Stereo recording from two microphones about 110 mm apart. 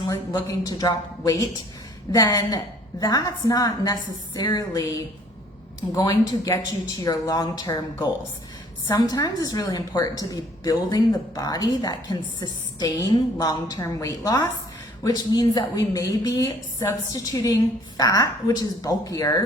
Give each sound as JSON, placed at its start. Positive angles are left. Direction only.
{"t": 0.4, "sound": "a woman's voice", "side_deg": 35}
{"t": 8.9, "sound": "a woman's voice", "side_deg": 30}